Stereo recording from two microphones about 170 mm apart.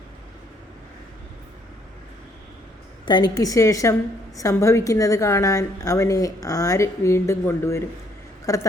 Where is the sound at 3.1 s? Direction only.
25° left (ahead or behind).